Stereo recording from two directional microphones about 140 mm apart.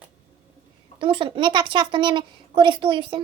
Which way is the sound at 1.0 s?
35° right (ahead or behind).